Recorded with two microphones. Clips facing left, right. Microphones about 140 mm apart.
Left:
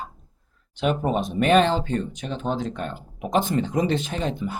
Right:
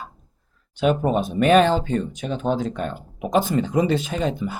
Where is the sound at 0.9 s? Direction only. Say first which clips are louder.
Right 3 dB; 40° right (ahead or behind).